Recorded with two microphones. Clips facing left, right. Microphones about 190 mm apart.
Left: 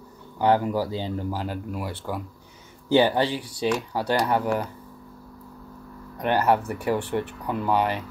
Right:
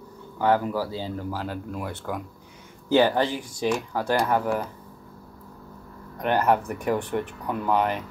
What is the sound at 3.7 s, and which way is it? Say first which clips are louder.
Speech: even; 10° right (ahead or behind).